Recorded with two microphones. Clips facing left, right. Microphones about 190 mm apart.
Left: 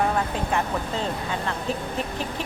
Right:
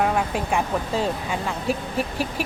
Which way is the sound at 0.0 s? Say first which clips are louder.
Right 2 dB; 10° right (ahead or behind).